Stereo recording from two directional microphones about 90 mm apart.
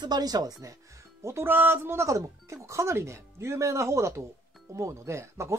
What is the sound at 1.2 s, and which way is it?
Speech, 25° right (ahead or behind).